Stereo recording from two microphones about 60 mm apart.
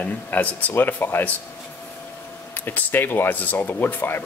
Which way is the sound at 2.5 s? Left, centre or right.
Left.